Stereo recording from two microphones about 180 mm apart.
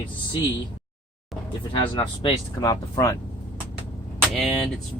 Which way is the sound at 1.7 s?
25° left (ahead or behind).